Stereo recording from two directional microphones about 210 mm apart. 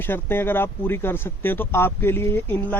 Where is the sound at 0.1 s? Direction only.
10° left (ahead or behind).